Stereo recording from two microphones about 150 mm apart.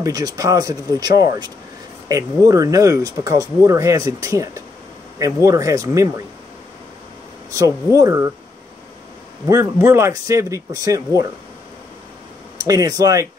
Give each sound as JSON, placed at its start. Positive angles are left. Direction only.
{"t": 0.0, "sound": "speech", "side_deg": -25}
{"t": 7.5, "sound": "speech", "side_deg": -20}
{"t": 9.5, "sound": "speech", "side_deg": -20}
{"t": 12.5, "sound": "speech", "side_deg": -25}